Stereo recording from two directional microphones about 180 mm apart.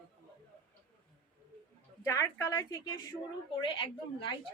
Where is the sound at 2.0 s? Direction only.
15° left (ahead or behind).